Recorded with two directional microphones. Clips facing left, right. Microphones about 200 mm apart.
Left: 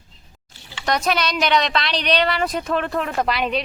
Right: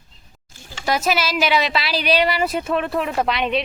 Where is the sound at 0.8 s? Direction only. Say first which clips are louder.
Right 1 dB; 5° right (ahead or behind).